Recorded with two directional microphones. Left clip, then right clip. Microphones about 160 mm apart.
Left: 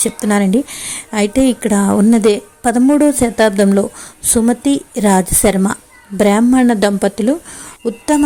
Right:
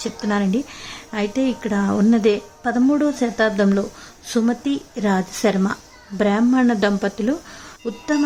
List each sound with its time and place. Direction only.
0.0 s a woman's voice: 35° left (ahead or behind)